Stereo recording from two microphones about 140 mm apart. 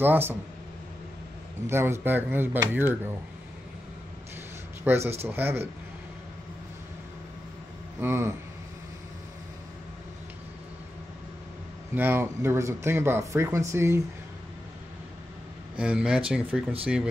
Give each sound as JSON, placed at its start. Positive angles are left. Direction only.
{"t": 0.0, "sound": "speech", "side_deg": -15}
{"t": 1.7, "sound": "speech", "side_deg": -15}
{"t": 4.8, "sound": "speech", "side_deg": -20}
{"t": 8.0, "sound": "speech", "side_deg": -20}
{"t": 11.9, "sound": "speech", "side_deg": -15}
{"t": 15.8, "sound": "speech", "side_deg": -5}